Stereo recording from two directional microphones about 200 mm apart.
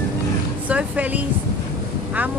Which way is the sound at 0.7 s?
5° right (ahead or behind).